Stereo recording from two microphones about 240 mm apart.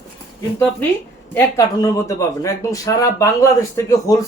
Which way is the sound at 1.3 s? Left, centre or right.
Centre.